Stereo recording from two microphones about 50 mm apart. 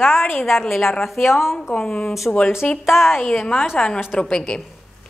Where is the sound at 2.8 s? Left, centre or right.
Centre.